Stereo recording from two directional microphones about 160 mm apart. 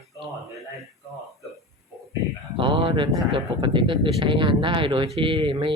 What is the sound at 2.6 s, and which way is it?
Speech, 30° right (ahead or behind).